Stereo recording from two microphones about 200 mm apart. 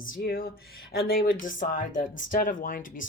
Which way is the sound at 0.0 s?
45° left (ahead or behind).